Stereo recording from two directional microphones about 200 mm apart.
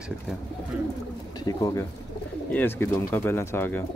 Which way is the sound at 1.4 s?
15° left (ahead or behind).